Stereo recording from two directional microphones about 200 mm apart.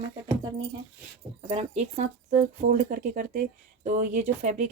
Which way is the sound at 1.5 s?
30° right (ahead or behind).